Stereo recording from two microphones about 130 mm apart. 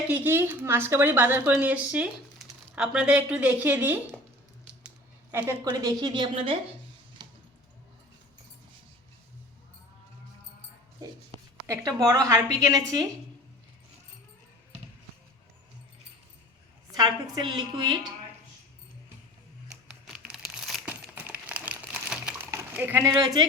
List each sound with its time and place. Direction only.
0.1 s speech: 15° right (ahead or behind)
5.3 s a woman's voice: 20° right (ahead or behind)
5.6 s a woman's voice: 30° right (ahead or behind)
12.0 s a woman's voice: 25° right (ahead or behind)
16.9 s a woman's voice: 30° right (ahead or behind)
19.9 s crumpling: 5° right (ahead or behind)
20.9 s a sound: 10° right (ahead or behind)
22.4 s a sound: 15° right (ahead or behind)
23.2 s a woman's voice: 35° right (ahead or behind)